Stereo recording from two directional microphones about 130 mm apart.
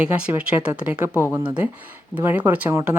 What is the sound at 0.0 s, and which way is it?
Speech, 10° right (ahead or behind).